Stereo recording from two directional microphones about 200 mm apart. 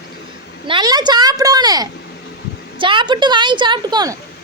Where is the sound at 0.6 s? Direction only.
25° right (ahead or behind).